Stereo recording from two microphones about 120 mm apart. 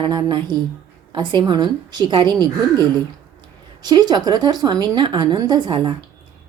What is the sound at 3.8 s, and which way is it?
A woman's voice, 35° right (ahead or behind).